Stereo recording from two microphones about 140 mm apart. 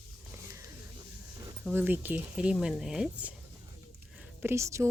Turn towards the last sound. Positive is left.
turn(degrees=-20)  # may be behind; listen again after turning